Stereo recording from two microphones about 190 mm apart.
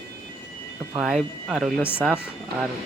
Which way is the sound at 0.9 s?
Centre (ahead or behind).